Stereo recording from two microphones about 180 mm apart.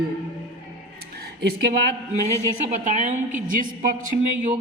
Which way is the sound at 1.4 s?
65° right (ahead or behind).